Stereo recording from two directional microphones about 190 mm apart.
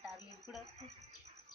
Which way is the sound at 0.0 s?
Centre (ahead or behind).